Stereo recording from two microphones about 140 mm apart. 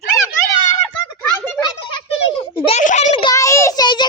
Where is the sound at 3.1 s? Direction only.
40° left (ahead or behind).